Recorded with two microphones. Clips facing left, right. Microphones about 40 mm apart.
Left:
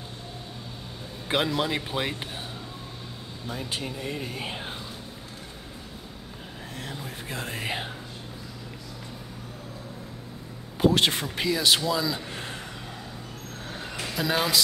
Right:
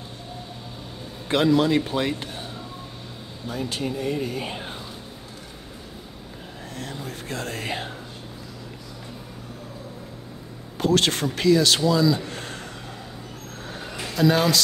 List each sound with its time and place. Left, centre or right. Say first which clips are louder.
1.3 s speech: right 7 dB; centre
3.8 s speech: right 7 dB; centre
6.8 s speech: right 3 dB; centre
10.8 s speech: right 1 dB; centre
12.3 s a sound: right 2 dB; centre
13.7 s a sound: right 6 dB; centre